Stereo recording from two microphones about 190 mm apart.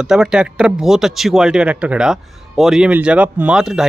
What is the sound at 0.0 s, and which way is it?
Speech, 5° right (ahead or behind).